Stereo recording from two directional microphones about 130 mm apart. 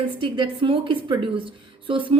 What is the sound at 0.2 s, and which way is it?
A woman's voice, 40° right (ahead or behind).